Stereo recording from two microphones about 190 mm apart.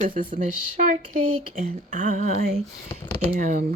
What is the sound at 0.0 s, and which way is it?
Speech, 45° right (ahead or behind).